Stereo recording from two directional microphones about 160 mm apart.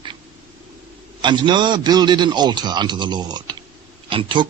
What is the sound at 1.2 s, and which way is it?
A man's voice, 30° right (ahead or behind).